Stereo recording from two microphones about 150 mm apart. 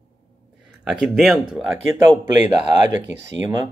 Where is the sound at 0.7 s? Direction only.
5° right (ahead or behind).